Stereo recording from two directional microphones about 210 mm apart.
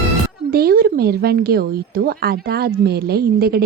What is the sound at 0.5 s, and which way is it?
A woman's voice, 45° right (ahead or behind).